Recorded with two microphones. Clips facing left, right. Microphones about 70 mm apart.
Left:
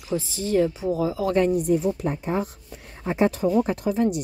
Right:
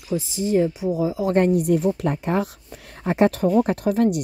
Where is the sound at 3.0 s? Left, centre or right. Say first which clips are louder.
Right 3 dB; right.